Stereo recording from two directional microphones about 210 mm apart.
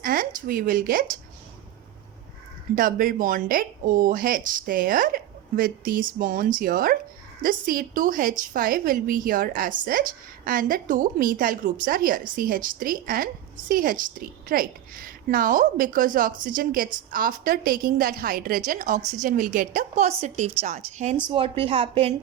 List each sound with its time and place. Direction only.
0.0 s speech: 40° right (ahead or behind)
2.7 s a woman's voice: 40° right (ahead or behind)